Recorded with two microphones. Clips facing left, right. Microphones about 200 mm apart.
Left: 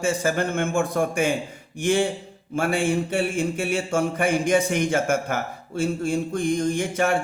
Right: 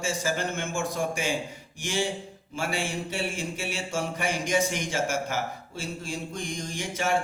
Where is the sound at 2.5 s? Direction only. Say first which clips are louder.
Left 8 dB; 55° left (ahead or behind).